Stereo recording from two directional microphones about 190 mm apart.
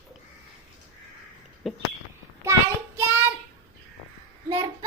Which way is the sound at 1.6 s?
Centre (ahead or behind).